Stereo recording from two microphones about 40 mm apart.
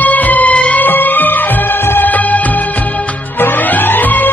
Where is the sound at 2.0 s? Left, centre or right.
Left.